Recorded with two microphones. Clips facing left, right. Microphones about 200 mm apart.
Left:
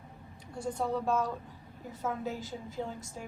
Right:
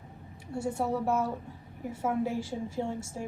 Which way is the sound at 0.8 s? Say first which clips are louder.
Right 1 dB; 25° right (ahead or behind).